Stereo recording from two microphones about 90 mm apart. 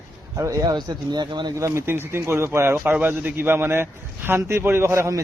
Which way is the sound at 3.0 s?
20° right (ahead or behind).